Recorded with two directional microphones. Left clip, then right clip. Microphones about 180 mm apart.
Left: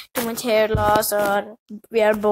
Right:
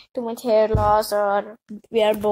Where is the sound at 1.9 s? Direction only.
60° left (ahead or behind).